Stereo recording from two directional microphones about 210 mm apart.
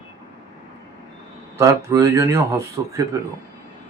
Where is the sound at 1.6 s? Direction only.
15° right (ahead or behind).